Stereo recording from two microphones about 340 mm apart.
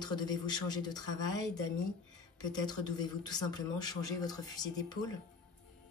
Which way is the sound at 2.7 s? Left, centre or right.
Centre.